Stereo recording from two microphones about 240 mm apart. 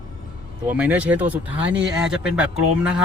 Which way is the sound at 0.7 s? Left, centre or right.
Centre.